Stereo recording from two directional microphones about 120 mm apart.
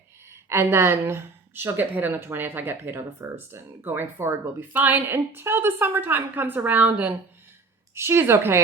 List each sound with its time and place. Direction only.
0.3 s a woman's voice: 20° right (ahead or behind)